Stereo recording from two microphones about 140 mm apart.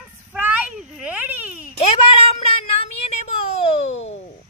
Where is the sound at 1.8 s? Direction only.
45° left (ahead or behind).